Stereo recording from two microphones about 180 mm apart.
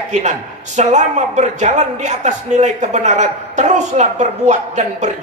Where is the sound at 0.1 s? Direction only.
40° right (ahead or behind).